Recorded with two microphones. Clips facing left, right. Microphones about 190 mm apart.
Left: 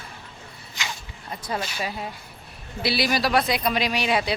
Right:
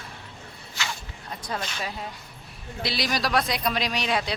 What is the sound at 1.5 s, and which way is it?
Speech, 5° left (ahead or behind).